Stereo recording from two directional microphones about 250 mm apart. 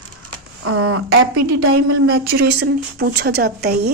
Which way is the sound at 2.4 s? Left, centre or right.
Right.